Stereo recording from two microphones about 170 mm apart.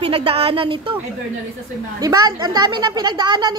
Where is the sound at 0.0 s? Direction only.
30° right (ahead or behind).